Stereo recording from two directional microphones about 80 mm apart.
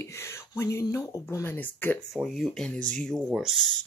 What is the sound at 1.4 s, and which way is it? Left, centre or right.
Speech, left.